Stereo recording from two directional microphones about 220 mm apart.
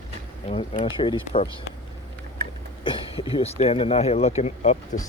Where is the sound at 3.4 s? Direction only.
25° left (ahead or behind).